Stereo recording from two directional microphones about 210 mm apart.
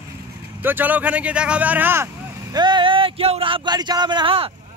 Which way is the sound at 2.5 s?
20° right (ahead or behind).